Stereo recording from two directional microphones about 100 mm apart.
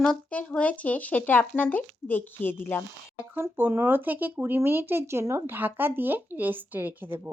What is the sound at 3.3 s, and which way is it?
Speech, 20° right (ahead or behind).